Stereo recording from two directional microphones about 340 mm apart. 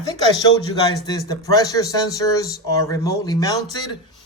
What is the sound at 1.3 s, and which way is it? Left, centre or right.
Speech, centre.